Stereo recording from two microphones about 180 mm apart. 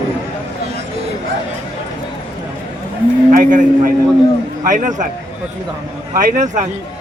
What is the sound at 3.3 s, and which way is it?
A man's voice, 45° right (ahead or behind).